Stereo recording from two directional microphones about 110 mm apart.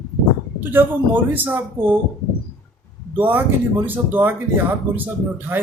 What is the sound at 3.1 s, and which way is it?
Speech, 15° right (ahead or behind).